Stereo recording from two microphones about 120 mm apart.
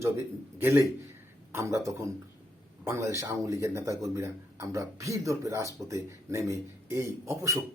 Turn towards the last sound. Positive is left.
turn(degrees=-25)  # may be behind; listen again after turning